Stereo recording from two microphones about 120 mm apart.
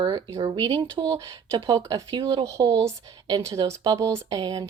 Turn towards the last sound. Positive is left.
turn(degrees=-30)  # may be behind; listen again after turning